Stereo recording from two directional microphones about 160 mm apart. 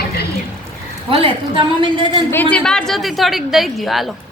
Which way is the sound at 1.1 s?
35° right (ahead or behind).